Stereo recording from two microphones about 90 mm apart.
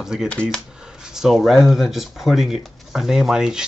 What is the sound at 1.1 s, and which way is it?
Speech, 5° right (ahead or behind).